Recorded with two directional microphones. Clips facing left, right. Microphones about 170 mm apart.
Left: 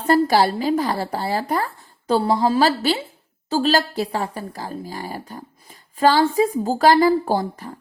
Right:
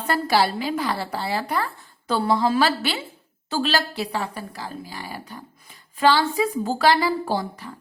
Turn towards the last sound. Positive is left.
turn(degrees=45)  # may be behind; listen again after turning